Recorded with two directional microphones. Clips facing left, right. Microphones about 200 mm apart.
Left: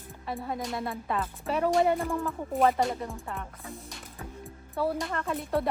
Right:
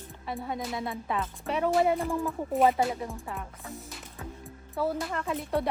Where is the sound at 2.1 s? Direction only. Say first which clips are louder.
Right 1 dB; 15° right (ahead or behind).